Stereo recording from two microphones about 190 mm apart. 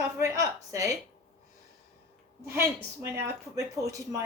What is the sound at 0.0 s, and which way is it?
Speech, 15° right (ahead or behind).